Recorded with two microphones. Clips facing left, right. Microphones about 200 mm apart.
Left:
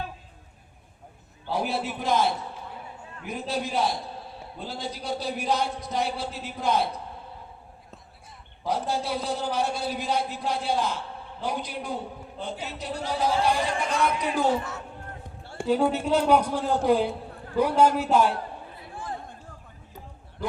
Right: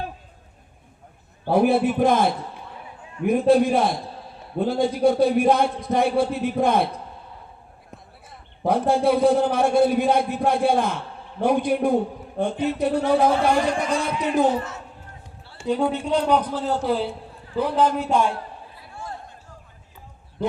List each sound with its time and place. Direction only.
1.5 s a man's voice: 55° right (ahead or behind)
8.6 s a man's voice: 55° right (ahead or behind)
14.2 s speech: 20° right (ahead or behind)
15.6 s a man's voice: 5° left (ahead or behind)
20.4 s a man's voice: 20° right (ahead or behind)